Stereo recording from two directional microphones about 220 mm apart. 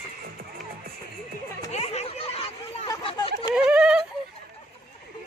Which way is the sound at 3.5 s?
5° right (ahead or behind).